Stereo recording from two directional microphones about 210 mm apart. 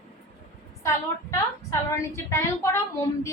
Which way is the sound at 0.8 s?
15° left (ahead or behind).